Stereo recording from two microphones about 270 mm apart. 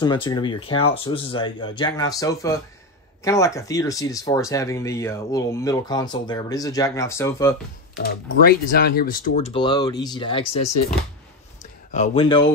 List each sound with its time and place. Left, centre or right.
0.0 s speech: centre
8.5 s speech: left
11.9 s speech: left